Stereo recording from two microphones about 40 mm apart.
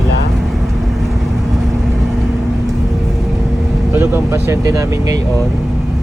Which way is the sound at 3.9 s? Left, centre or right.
Right.